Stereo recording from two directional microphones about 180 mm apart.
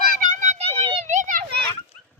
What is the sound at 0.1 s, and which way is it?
Children playing, 45° right (ahead or behind).